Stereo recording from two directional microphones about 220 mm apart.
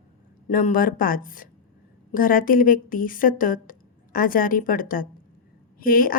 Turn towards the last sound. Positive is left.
turn(degrees=40)  # may be behind; listen again after turning